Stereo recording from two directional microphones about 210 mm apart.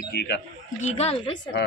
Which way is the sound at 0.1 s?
50° left (ahead or behind).